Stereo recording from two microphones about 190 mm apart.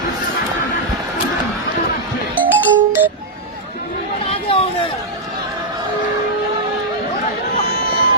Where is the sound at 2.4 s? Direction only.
10° right (ahead or behind).